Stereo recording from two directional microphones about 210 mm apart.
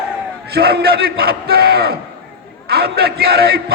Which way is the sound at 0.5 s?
50° right (ahead or behind).